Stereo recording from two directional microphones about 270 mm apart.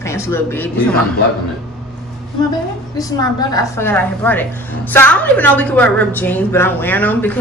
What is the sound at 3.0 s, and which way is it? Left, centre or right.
A woman's voice, centre.